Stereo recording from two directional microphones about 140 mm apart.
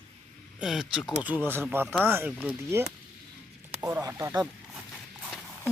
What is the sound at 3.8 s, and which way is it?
Speech, 20° right (ahead or behind).